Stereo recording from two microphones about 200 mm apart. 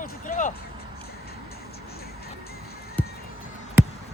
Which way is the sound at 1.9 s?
50° left (ahead or behind).